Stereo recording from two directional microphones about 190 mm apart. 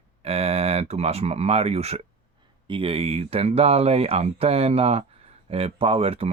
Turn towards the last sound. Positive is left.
turn(degrees=-30)  # may be behind; listen again after turning